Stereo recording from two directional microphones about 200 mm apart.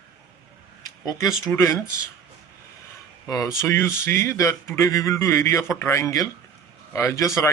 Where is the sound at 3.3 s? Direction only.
20° left (ahead or behind).